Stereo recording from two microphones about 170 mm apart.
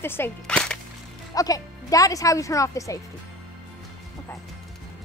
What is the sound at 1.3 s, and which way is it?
Speech, 20° left (ahead or behind).